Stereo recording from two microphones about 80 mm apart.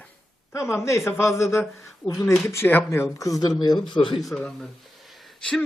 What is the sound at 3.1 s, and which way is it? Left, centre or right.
Speech, left.